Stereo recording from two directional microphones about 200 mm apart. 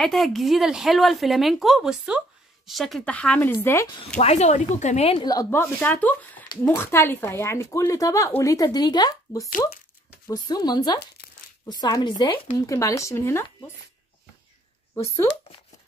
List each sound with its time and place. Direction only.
0.0 s speech: centre (ahead or behind); by 3.9 s 15° left (ahead or behind)
4.2 s speech: 35° left (ahead or behind); by 13.5 s 15° left (ahead or behind)